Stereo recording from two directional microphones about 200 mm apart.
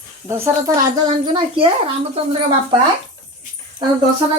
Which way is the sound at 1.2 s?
25° right (ahead or behind).